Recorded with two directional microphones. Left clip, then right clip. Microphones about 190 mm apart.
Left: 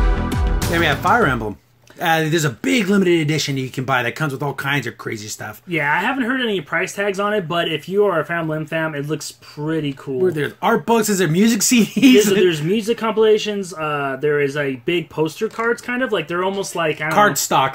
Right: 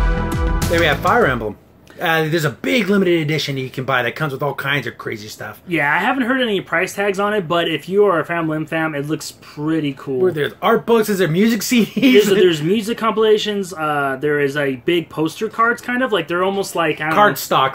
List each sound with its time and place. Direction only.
0.7 s speech: 35° left (ahead or behind)
5.7 s speech: 10° right (ahead or behind)
10.2 s speech: 30° left (ahead or behind)
12.4 s speech: 10° right (ahead or behind)
17.1 s speech: 35° left (ahead or behind)